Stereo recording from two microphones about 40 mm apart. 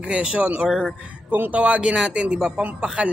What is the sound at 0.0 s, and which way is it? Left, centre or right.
Speech, right.